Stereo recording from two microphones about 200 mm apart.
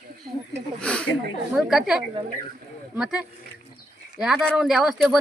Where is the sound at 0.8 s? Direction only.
5° left (ahead or behind).